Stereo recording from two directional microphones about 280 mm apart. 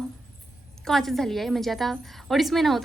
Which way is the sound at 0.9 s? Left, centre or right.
Centre.